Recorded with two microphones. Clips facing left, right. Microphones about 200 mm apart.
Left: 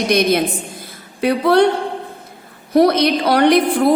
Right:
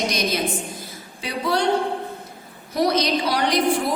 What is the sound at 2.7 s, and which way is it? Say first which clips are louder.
A woman's voice: left 7 dB; 60° left (ahead or behind).